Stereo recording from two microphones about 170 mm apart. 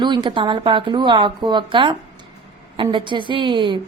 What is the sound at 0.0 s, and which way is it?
A woman's voice, 25° right (ahead or behind).